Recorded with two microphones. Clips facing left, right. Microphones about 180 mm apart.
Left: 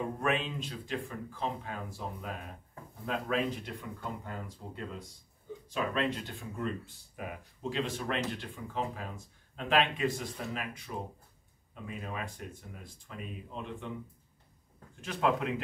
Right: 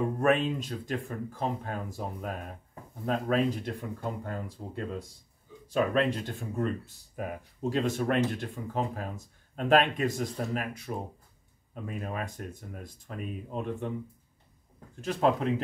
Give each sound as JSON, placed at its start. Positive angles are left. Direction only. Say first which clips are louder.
{"t": 0.2, "sound": "speech", "louder": "right 8 dB", "side_deg": -45}
{"t": 15.0, "sound": "speech", "louder": "right 4 dB", "side_deg": -35}